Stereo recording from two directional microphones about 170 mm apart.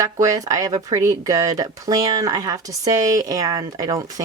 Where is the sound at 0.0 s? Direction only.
20° right (ahead or behind).